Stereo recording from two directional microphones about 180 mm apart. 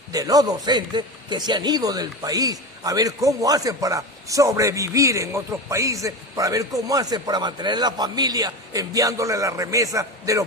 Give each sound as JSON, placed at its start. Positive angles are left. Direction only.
{"t": 0.1, "sound": "a man's voice", "side_deg": -20}